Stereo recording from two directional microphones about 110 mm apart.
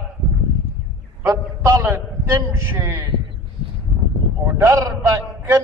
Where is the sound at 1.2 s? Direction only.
30° right (ahead or behind).